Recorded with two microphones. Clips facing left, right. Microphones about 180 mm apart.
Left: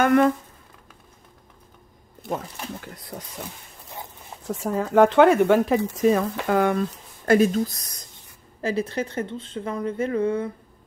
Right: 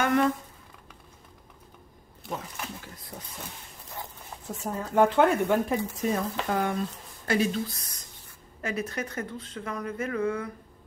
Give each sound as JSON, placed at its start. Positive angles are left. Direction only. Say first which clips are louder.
{"t": 0.0, "sound": "speech", "louder": "left 6 dB", "side_deg": 55}
{"t": 4.6, "sound": "speech", "louder": "left 6 dB", "side_deg": 90}
{"t": 7.2, "sound": "speech", "louder": "left 8 dB", "side_deg": 45}